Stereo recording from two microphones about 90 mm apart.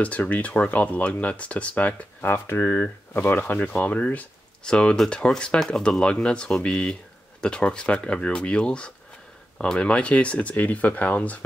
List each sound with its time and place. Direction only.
0.0 s speech: 15° left (ahead or behind)
2.2 s speech: 25° left (ahead or behind)